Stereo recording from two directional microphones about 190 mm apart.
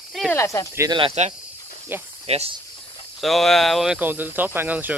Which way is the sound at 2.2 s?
35° right (ahead or behind).